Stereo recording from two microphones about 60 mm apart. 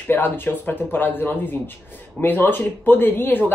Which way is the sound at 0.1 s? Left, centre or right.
Left.